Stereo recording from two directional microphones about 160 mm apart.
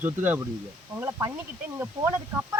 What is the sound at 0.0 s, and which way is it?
Speech, 10° right (ahead or behind).